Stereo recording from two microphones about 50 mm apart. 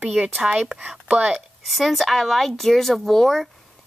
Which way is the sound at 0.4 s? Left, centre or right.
Centre.